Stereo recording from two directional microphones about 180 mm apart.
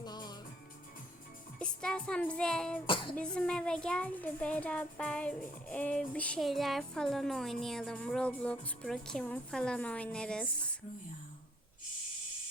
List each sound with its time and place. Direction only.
0.0 s music: 25° left (ahead or behind)
1.5 s music: 5° left (ahead or behind)
2.8 s a sound: 25° left (ahead or behind)
3.2 s speech: 5° left (ahead or behind)